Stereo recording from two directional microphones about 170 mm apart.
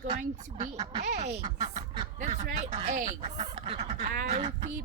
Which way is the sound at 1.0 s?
45° right (ahead or behind).